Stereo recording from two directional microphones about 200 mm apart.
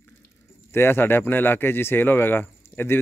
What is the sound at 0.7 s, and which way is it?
Speech, 10° left (ahead or behind).